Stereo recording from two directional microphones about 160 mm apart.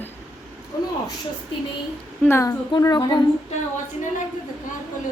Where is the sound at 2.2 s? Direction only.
15° left (ahead or behind).